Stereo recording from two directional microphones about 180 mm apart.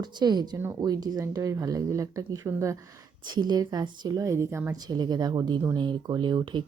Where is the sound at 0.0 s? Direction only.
25° right (ahead or behind).